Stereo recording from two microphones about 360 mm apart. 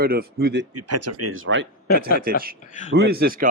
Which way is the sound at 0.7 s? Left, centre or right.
Right.